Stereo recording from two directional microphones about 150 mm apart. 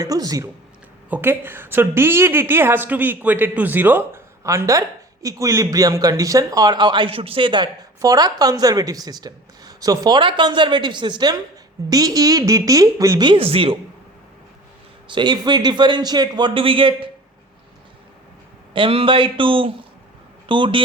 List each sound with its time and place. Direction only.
0.0 s a woman's voice: 25° right (ahead or behind)
15.0 s a man's voice: 30° right (ahead or behind)
18.7 s a man's voice: 35° right (ahead or behind)